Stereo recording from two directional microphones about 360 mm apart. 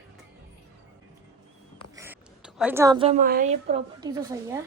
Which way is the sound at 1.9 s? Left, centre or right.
Centre.